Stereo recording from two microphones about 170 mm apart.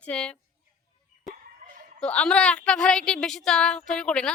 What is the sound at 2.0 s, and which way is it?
Speech, 5° left (ahead or behind).